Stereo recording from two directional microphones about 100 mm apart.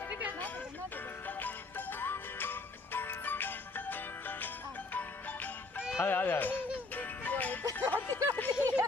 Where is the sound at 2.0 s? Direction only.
20° left (ahead or behind).